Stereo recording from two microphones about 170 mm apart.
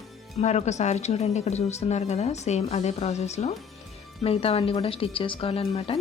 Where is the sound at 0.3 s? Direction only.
40° left (ahead or behind).